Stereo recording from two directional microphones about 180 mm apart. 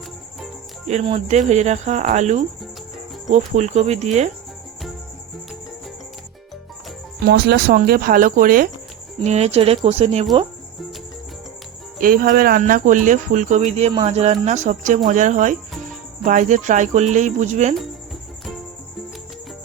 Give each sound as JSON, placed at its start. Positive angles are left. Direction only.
{"t": 0.9, "sound": "speech", "side_deg": -35}
{"t": 7.3, "sound": "speech", "side_deg": -65}
{"t": 9.2, "sound": "speech", "side_deg": -35}
{"t": 11.9, "sound": "speech", "side_deg": -50}